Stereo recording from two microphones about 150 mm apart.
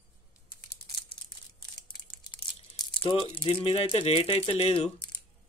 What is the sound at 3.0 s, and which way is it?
Speech, 40° left (ahead or behind).